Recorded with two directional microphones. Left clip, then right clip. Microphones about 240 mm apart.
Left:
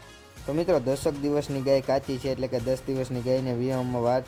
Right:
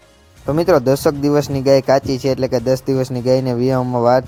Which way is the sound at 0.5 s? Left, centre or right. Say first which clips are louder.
Right 11 dB; right.